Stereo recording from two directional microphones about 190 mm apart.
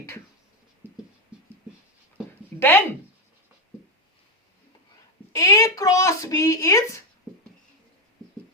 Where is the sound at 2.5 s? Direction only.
10° left (ahead or behind).